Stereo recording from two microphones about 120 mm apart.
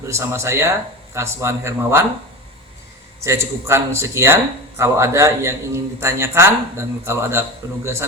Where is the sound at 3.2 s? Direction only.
25° right (ahead or behind).